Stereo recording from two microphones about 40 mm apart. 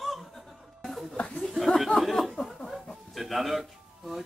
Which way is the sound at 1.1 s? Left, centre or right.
Left.